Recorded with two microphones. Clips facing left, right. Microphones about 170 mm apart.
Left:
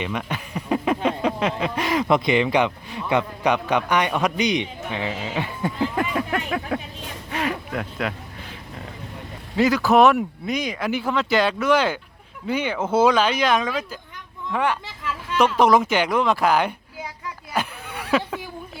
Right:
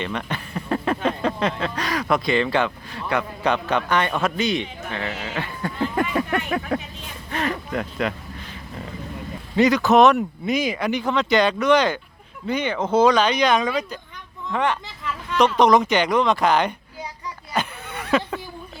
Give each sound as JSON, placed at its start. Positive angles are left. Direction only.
{"t": 0.0, "sound": "a sound", "side_deg": 10}
{"t": 1.7, "sound": "a man's voice", "side_deg": 25}
{"t": 5.8, "sound": "speech", "side_deg": 0}
{"t": 9.6, "sound": "a man's voice", "side_deg": 0}
{"t": 17.5, "sound": "horse", "side_deg": 5}